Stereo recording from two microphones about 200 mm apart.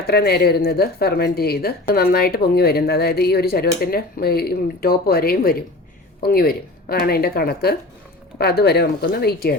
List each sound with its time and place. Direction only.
0.1 s speech: 55° left (ahead or behind)